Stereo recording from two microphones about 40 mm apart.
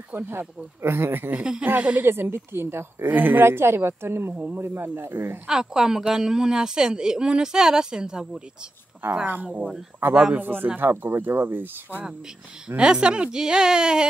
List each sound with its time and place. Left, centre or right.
0.1 s speech: right
2.0 s speech: right
3.1 s speech: right
3.4 s speech: right
4.6 s a man's voice: right
5.5 s speech: centre
9.0 s speech: right
12.6 s speech: right